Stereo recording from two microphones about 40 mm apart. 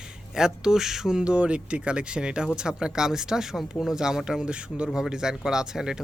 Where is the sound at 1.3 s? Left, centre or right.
Right.